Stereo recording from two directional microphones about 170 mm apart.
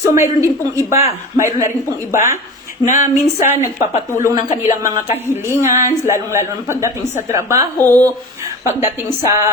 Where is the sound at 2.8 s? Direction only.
50° left (ahead or behind).